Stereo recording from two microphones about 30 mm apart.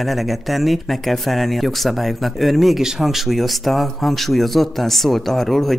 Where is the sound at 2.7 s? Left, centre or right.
Centre.